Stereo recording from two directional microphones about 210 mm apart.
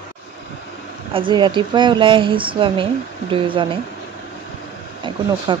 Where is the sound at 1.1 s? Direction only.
20° right (ahead or behind).